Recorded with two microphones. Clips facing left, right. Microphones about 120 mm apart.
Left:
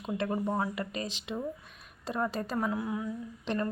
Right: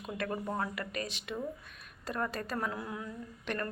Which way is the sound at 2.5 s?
5° left (ahead or behind).